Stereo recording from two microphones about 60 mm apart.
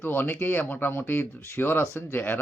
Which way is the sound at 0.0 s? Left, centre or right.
Left.